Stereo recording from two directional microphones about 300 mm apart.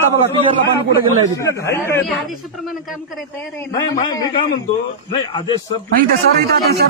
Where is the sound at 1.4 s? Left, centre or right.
Centre.